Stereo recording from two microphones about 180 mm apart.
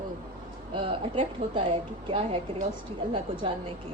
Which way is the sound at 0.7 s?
30° right (ahead or behind).